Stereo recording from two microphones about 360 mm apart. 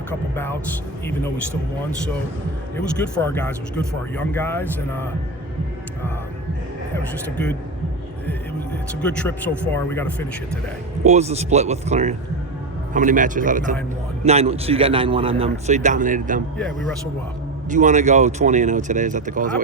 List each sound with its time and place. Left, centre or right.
0.1 s speech: centre
3.0 s speech: centre
9.0 s speech: centre
11.0 s a man's voice: centre
17.7 s speech: centre